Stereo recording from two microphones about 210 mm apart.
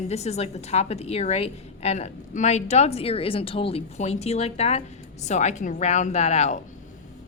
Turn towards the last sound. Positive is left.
turn(degrees=30)  # may be behind; listen again after turning